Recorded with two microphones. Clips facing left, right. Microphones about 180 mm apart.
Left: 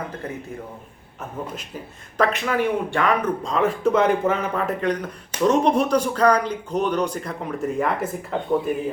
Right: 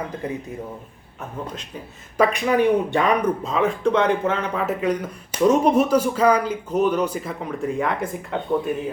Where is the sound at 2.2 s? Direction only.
15° right (ahead or behind).